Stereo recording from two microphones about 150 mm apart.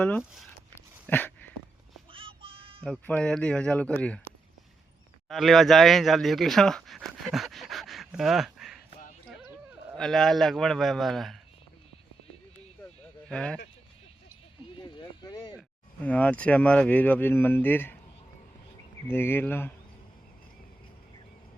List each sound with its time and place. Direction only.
0.8 s a sound: 15° left (ahead or behind)
2.1 s child singing: 35° right (ahead or behind)
2.8 s speech: 5° left (ahead or behind)
5.3 s speech: centre (ahead or behind)
9.9 s a man's voice: centre (ahead or behind)
13.2 s speech: 5° left (ahead or behind)
14.8 s a sound: 30° left (ahead or behind)
16.0 s speech: 10° left (ahead or behind)
19.0 s speech: 15° left (ahead or behind)